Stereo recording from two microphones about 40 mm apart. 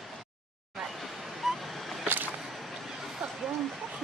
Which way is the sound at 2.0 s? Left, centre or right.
Right.